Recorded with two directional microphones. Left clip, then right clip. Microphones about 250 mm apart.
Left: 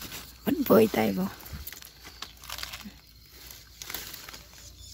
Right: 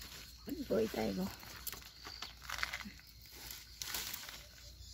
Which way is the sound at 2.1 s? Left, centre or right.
Centre.